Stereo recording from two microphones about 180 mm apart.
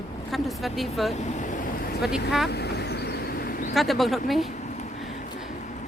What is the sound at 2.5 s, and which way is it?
Vehicle, 65° left (ahead or behind).